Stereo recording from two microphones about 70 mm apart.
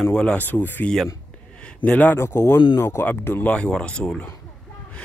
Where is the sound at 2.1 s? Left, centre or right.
Left.